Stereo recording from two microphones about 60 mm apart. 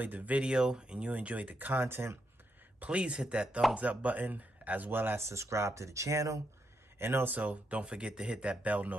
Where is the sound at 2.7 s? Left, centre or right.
Right.